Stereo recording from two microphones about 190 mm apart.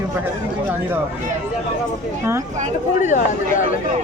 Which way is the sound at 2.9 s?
40° left (ahead or behind).